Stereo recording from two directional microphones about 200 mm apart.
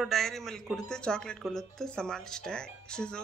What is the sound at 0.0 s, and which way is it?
Speech, centre (ahead or behind).